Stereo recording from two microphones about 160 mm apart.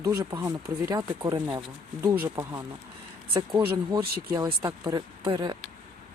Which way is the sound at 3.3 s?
25° right (ahead or behind).